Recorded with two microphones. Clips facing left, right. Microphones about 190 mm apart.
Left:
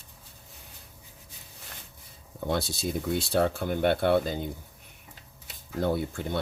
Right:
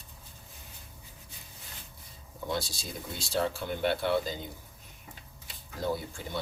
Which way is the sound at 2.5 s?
60° left (ahead or behind).